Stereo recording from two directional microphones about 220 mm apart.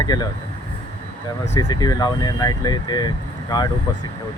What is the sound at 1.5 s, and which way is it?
Speech, 20° left (ahead or behind).